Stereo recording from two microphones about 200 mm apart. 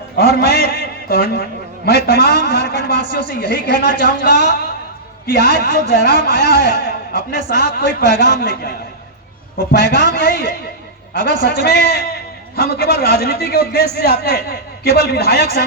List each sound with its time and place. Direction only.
0.3 s a sound: 50° left (ahead or behind)
3.1 s a man's voice: 45° left (ahead or behind)
9.7 s a man's voice: 55° left (ahead or behind)